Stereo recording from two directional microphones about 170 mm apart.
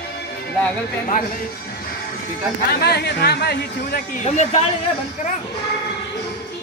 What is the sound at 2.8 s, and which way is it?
Speech, 70° left (ahead or behind).